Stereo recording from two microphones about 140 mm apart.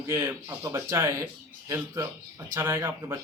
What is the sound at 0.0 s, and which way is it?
Speech, 15° right (ahead or behind).